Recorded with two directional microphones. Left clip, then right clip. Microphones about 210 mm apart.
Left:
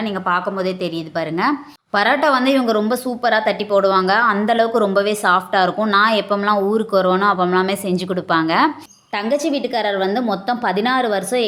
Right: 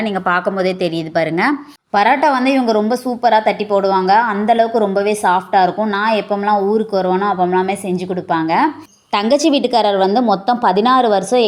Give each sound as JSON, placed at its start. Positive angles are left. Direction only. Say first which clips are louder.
{"t": 0.0, "sound": "a woman's voice", "louder": "right 3 dB", "side_deg": -15}
{"t": 9.1, "sound": "a woman's voice", "louder": "right 6 dB", "side_deg": -25}